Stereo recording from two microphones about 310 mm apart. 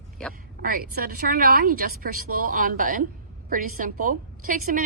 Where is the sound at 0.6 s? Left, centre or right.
Right.